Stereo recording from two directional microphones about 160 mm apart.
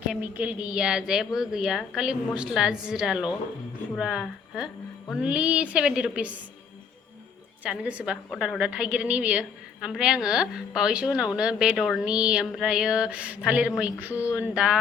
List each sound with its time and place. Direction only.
0.1 s a woman's voice: 10° right (ahead or behind)
7.6 s a woman's voice: 10° right (ahead or behind)